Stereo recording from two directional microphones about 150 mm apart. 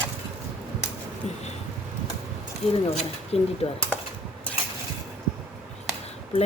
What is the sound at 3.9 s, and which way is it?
Cutlery, 10° left (ahead or behind).